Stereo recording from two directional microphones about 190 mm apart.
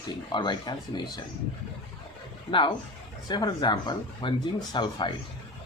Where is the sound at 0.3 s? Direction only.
25° left (ahead or behind).